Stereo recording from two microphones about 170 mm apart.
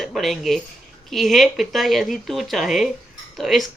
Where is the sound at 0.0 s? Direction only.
Centre (ahead or behind).